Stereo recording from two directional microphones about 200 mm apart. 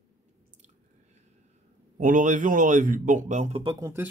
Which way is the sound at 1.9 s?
40° right (ahead or behind).